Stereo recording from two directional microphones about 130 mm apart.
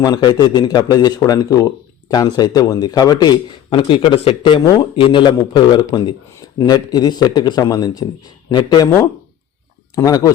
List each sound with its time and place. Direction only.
0.0 s a man's voice: 30° left (ahead or behind)
9.9 s speech: 25° left (ahead or behind)